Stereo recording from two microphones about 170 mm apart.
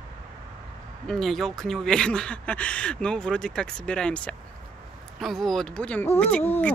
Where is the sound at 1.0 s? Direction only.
Centre (ahead or behind).